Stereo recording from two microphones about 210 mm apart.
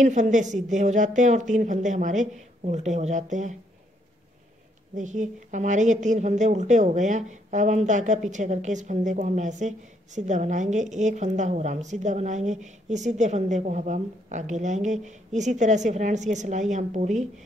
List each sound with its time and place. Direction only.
0.0 s a woman's voice: 35° right (ahead or behind)
4.9 s a woman's voice: 35° right (ahead or behind)